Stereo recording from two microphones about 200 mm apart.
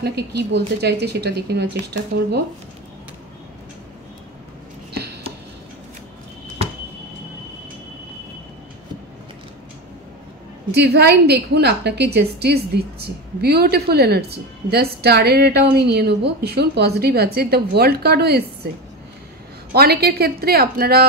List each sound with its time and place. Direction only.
0.0 s a woman's voice: 55° right (ahead or behind)
10.7 s a woman's voice: 55° right (ahead or behind)
19.7 s a woman's voice: 50° right (ahead or behind)